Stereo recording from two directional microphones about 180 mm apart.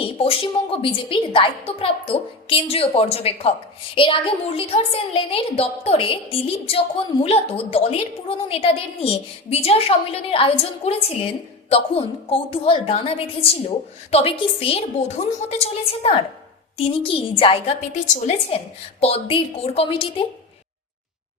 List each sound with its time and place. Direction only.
0.0 s a woman's voice: 30° left (ahead or behind)